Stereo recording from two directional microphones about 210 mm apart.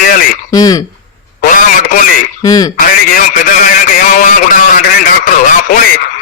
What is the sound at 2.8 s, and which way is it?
Speech, 40° left (ahead or behind).